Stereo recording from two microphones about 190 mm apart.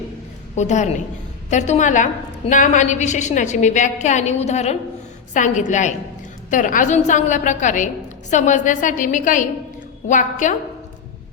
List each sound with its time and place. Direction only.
0.5 s a woman's voice: 40° left (ahead or behind)